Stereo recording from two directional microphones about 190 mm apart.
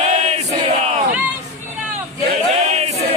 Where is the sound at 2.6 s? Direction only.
35° right (ahead or behind).